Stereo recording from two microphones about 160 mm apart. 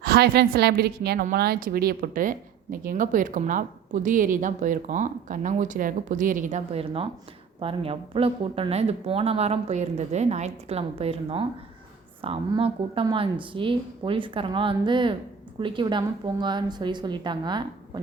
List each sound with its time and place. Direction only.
0.0 s a woman's voice: 75° right (ahead or behind); by 18.0 s 30° right (ahead or behind)